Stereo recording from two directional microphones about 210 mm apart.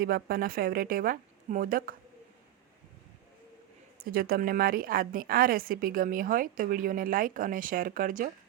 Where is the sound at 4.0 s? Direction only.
45° right (ahead or behind).